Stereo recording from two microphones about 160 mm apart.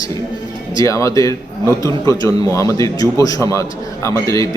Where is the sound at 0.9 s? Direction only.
20° left (ahead or behind).